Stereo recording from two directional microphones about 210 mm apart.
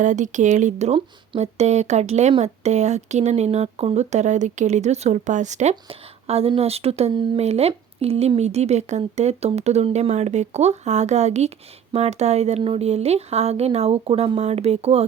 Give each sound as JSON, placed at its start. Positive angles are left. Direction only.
{"t": 0.0, "sound": "speech", "side_deg": -35}